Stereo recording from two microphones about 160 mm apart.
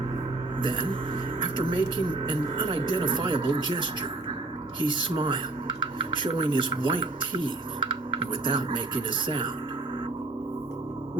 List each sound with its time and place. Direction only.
0.6 s speech: 30° right (ahead or behind)
4.9 s rub: 30° right (ahead or behind)